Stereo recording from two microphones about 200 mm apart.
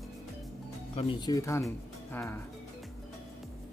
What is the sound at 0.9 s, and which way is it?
Speech, 25° left (ahead or behind).